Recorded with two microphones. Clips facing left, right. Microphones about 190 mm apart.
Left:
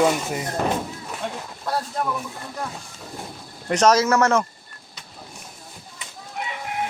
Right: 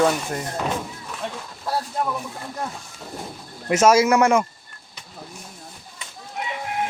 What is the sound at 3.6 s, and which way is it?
Speech, 5° right (ahead or behind).